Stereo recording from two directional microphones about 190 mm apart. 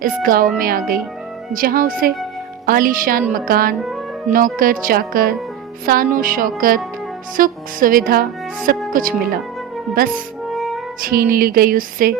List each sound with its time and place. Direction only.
0.0 s speech: 50° right (ahead or behind)
10.5 s music: centre (ahead or behind)
11.0 s speech: 50° right (ahead or behind)